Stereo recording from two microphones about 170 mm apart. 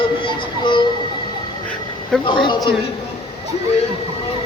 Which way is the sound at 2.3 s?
30° left (ahead or behind).